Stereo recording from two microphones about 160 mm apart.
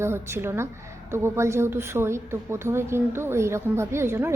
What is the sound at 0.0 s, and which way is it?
Speech, 15° right (ahead or behind).